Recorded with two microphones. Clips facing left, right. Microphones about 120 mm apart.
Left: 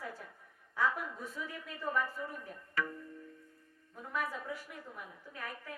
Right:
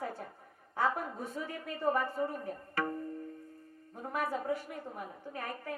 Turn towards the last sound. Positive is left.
turn(degrees=-45)  # may be behind; listen again after turning